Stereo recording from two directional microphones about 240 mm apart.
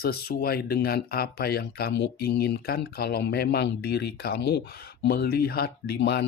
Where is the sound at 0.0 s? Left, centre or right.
Left.